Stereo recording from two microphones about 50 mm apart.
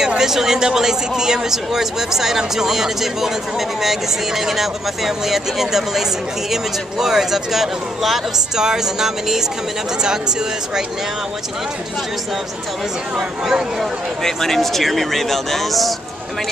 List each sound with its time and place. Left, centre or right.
0.2 s speech: centre
13.1 s speech: centre
14.2 s speech: centre